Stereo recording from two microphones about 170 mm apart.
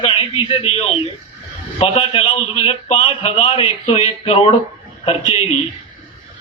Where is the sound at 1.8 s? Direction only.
35° left (ahead or behind).